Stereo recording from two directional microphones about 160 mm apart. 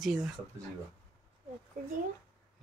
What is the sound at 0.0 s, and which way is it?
Speech, centre (ahead or behind).